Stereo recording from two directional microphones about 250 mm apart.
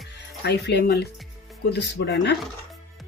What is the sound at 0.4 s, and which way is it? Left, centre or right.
Speech, left.